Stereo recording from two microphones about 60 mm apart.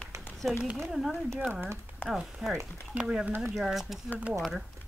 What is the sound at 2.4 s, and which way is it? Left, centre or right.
Speech, centre.